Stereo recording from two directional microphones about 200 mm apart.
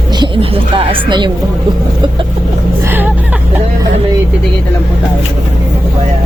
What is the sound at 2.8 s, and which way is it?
Vehicle, 10° right (ahead or behind).